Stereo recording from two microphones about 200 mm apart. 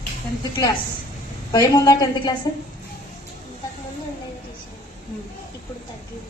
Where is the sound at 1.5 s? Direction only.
20° left (ahead or behind).